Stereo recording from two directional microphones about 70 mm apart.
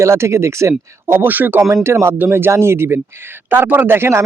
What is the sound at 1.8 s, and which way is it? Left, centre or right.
Speech, right.